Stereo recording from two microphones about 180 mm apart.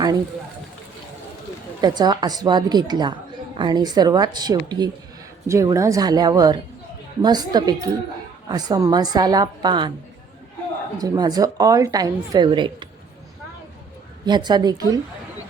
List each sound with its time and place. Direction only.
1.8 s a woman's voice: 20° right (ahead or behind)
10.9 s a woman's voice: 20° right (ahead or behind)
14.3 s a woman's voice: 25° right (ahead or behind)